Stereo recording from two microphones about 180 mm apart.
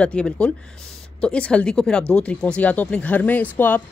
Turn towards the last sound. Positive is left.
turn(degrees=10)  # may be behind; listen again after turning